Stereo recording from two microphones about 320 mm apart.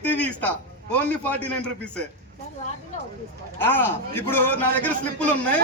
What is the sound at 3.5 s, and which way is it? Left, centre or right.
A man's voice, centre.